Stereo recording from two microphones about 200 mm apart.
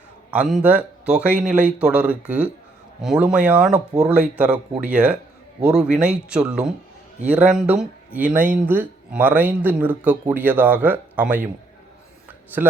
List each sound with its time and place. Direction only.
0.3 s speech: 5° right (ahead or behind)